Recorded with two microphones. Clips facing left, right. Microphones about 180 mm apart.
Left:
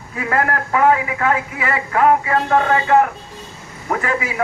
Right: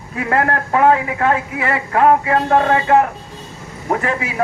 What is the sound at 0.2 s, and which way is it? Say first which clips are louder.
A man's voice: right 2 dB; 35° right (ahead or behind).